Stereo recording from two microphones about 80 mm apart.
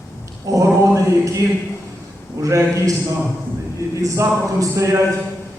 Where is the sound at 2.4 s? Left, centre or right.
Right.